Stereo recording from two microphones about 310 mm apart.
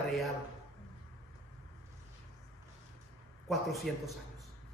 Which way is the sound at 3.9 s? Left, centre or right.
Centre.